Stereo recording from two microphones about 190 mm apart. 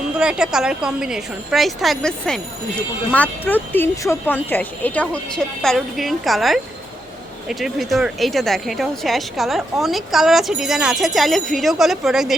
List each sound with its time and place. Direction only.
0.2 s speech: 5° right (ahead or behind)